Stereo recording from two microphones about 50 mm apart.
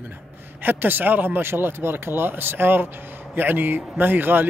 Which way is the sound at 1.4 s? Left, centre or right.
Right.